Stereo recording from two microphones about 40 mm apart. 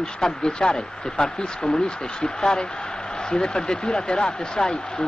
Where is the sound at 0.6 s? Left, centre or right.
Centre.